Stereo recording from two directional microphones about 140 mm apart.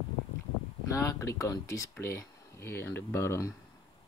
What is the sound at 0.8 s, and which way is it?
Speech, 20° left (ahead or behind).